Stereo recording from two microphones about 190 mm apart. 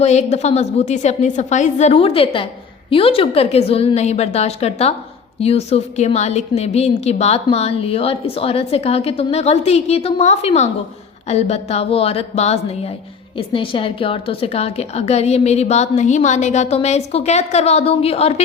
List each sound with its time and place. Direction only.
0.0 s a woman's voice: 35° left (ahead or behind)